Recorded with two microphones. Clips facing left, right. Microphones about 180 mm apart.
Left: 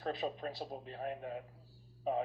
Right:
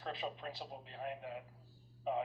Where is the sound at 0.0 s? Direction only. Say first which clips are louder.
Left 5 dB; 40° left (ahead or behind).